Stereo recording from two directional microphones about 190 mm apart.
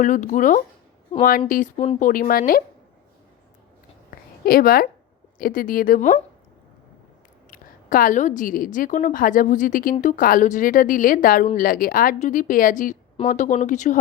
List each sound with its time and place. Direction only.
0.0 s a woman's voice: 40° left (ahead or behind)
1.1 s a woman's voice: 30° left (ahead or behind)
1.5 s a woman's voice: 45° left (ahead or behind)
4.4 s a woman's voice: 50° left (ahead or behind)
7.5 s a woman's voice: 45° left (ahead or behind)